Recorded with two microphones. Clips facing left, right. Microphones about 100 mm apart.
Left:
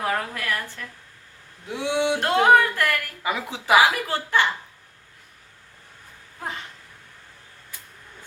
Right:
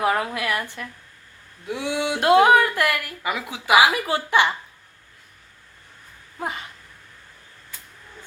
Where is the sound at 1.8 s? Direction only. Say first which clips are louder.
Left 3 dB; 20° left (ahead or behind).